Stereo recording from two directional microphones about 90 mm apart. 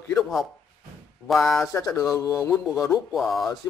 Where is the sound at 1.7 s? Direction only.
35° left (ahead or behind).